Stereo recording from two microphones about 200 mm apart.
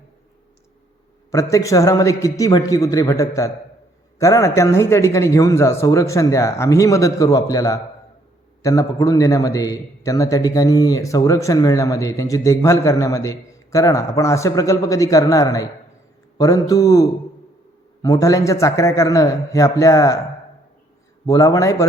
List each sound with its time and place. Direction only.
1.3 s speech: 15° left (ahead or behind)
21.2 s speech: 15° left (ahead or behind)